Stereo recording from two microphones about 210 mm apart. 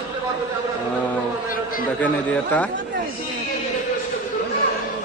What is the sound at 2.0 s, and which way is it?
Speech, 5° left (ahead or behind).